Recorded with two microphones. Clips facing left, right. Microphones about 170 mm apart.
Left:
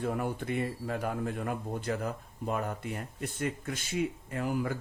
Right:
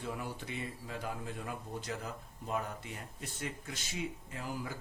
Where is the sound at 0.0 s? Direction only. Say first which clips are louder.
Left 8 dB; 55° left (ahead or behind).